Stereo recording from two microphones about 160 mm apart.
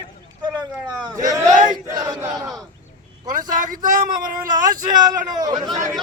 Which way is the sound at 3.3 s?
55° right (ahead or behind).